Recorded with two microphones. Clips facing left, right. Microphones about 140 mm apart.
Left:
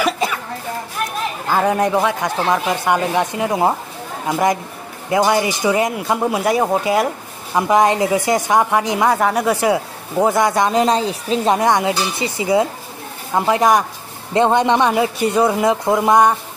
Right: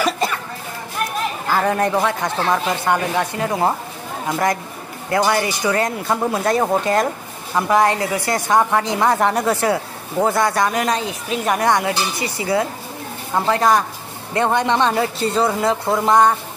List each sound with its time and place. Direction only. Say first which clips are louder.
0.0 s cough: left 1 dB; 5° left (ahead or behind)
1.5 s speech: left 2 dB; 15° left (ahead or behind)
7.5 s speech: left 2 dB; 20° left (ahead or behind)